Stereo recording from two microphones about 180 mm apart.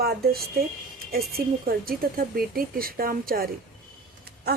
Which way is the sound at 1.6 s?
55° right (ahead or behind).